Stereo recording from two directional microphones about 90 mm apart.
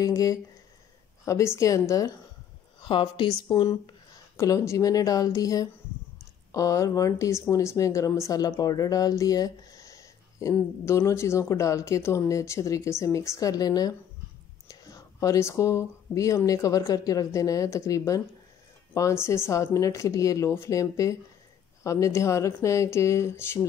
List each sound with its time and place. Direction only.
0.0 s speech: 40° left (ahead or behind)
2.8 s speech: 70° left (ahead or behind)
4.4 s speech: 35° left (ahead or behind)
19.2 s speech: 30° left (ahead or behind)